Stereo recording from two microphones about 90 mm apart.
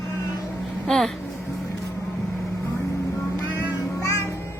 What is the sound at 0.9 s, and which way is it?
Speech, 5° left (ahead or behind).